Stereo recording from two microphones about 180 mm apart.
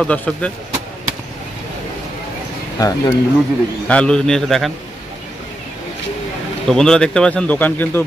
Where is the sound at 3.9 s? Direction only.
5° left (ahead or behind).